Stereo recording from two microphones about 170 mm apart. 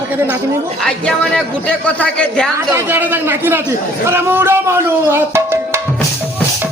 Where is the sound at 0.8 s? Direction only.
5° left (ahead or behind).